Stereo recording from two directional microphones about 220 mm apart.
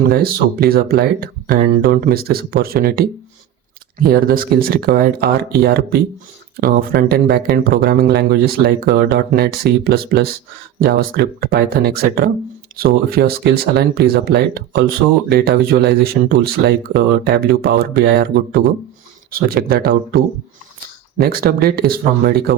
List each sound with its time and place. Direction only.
0.1 s speech: 45° right (ahead or behind)